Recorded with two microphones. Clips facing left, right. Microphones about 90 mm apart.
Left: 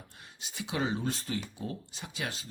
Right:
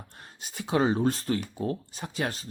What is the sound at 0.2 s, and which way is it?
Speech, 45° right (ahead or behind).